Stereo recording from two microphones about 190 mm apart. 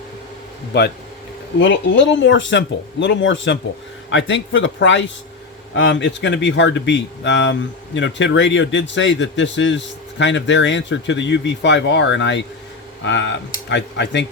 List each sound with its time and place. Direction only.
1.5 s a man's voice: 75° left (ahead or behind)
5.7 s a man's voice: 65° left (ahead or behind)